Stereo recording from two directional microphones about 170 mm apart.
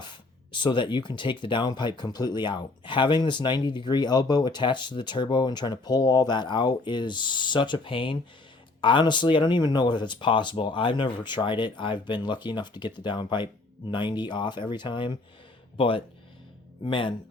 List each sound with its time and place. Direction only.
0.0 s speech: 25° left (ahead or behind)